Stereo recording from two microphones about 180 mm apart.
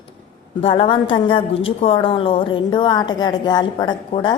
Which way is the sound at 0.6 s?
30° left (ahead or behind).